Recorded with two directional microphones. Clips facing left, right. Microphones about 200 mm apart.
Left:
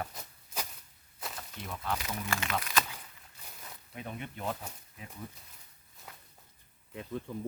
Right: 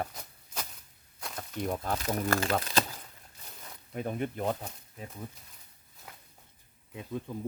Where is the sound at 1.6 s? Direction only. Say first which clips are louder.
Right 5 dB; 45° right (ahead or behind).